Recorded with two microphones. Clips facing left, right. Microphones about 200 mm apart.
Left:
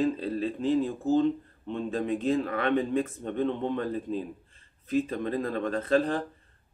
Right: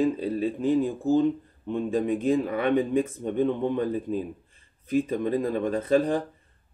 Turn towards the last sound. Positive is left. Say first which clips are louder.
# right 3 dB
turn(degrees=-10)  # may be behind; listen again after turning